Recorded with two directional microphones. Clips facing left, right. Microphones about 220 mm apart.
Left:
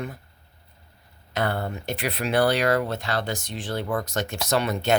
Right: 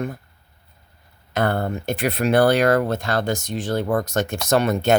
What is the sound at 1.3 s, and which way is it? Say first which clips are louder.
Speech: right 5 dB; 50° right (ahead or behind).